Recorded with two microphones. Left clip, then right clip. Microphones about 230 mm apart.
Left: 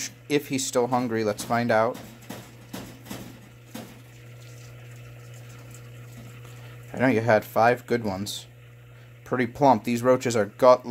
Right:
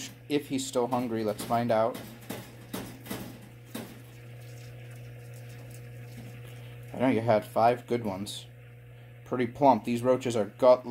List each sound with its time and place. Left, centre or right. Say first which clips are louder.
0.0 s speech: left 5 dB; left
6.9 s speech: left 4 dB; left